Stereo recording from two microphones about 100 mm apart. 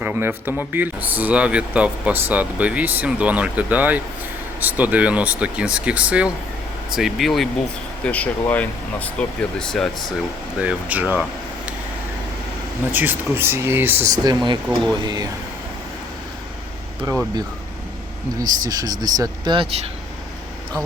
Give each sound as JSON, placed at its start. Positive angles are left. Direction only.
{"t": 0.0, "sound": "speech", "side_deg": -20}
{"t": 6.9, "sound": "speech", "side_deg": 0}
{"t": 8.0, "sound": "speech", "side_deg": 15}
{"t": 10.6, "sound": "speech", "side_deg": -15}
{"t": 12.9, "sound": "speech", "side_deg": -20}
{"t": 14.1, "sound": "speech", "side_deg": -45}
{"t": 18.4, "sound": "speech", "side_deg": -40}
{"t": 19.5, "sound": "speech", "side_deg": -90}